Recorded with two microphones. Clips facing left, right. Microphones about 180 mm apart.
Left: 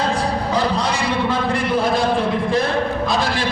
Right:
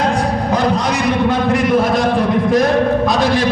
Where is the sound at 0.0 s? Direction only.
30° left (ahead or behind).